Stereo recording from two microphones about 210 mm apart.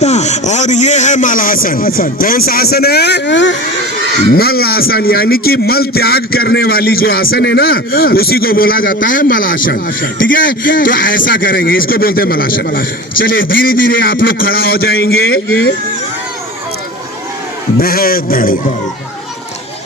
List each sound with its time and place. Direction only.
0.0 s a man's voice: 35° left (ahead or behind); by 3.6 s 60° left (ahead or behind)
4.3 s a man's voice: 45° left (ahead or behind)
17.7 s a man's voice: 45° left (ahead or behind)